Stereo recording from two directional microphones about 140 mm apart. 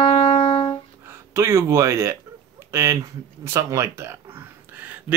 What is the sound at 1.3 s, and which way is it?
Speech, 20° right (ahead or behind).